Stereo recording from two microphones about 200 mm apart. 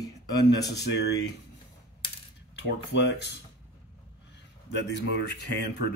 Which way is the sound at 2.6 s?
60° left (ahead or behind).